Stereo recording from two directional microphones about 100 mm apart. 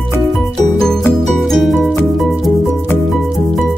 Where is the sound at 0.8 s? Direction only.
5° left (ahead or behind).